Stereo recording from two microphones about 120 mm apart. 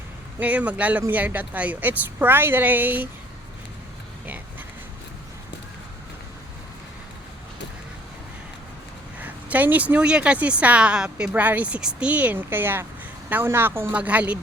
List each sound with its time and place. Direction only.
0.3 s speech: 10° right (ahead or behind)
9.1 s speech: 10° right (ahead or behind)